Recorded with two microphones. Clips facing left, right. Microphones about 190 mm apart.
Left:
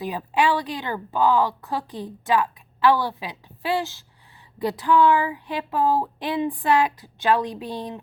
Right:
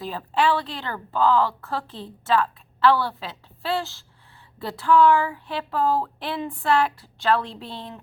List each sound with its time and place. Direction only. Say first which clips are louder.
0.0 s a woman's voice: left 1 dB; 15° left (ahead or behind)